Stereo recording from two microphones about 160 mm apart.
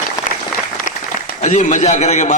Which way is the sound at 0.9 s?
55° left (ahead or behind).